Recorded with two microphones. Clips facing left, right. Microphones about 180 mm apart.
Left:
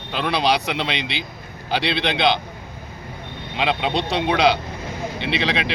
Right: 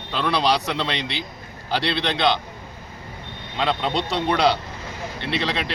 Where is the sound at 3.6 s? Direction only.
20° left (ahead or behind).